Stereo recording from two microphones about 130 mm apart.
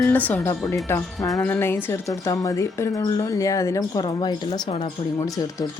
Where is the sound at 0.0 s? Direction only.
15° left (ahead or behind).